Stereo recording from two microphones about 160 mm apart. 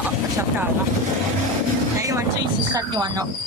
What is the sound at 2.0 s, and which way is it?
Vehicle, 20° right (ahead or behind).